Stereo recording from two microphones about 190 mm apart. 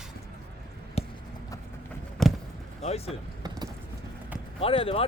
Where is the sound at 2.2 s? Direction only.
Centre (ahead or behind).